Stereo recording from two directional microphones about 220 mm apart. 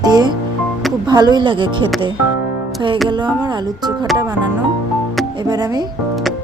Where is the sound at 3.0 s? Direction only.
20° right (ahead or behind).